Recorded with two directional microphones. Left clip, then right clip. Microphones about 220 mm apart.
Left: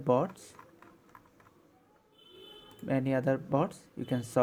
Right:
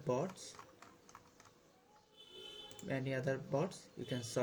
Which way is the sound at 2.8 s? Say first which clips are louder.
Left 9 dB; 40° left (ahead or behind).